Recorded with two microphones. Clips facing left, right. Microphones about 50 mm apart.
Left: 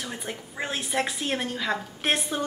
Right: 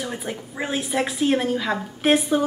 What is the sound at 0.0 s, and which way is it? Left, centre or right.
A woman's voice, centre.